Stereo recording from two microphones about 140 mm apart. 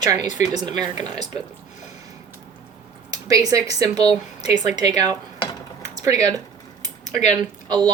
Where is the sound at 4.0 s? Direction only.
45° left (ahead or behind).